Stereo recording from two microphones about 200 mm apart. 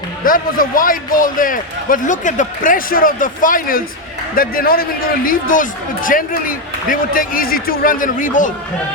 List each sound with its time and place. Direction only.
0.3 s a man's voice: 45° left (ahead or behind)